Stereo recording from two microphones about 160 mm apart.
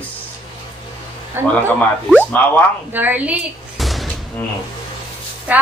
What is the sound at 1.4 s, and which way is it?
Speech, 15° right (ahead or behind).